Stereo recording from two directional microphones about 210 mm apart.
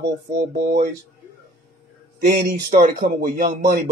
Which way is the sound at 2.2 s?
40° right (ahead or behind).